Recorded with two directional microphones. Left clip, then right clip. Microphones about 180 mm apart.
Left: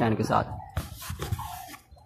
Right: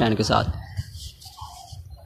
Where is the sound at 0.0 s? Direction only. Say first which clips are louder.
Right 4 dB; 30° right (ahead or behind).